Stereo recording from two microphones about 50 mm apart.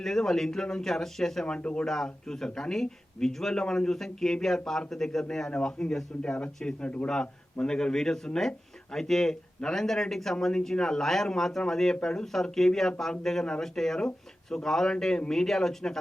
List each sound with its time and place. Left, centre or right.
0.0 s speech: centre
1.5 s speech: left
5.5 s speech: left
7.6 s speech: centre